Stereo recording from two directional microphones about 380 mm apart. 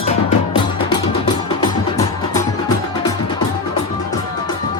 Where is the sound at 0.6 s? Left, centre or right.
Centre.